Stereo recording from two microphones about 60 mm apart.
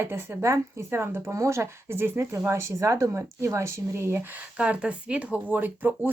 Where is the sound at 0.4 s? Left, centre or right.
Right.